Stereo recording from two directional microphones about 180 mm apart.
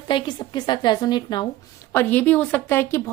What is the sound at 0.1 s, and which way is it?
A woman's voice, 25° left (ahead or behind).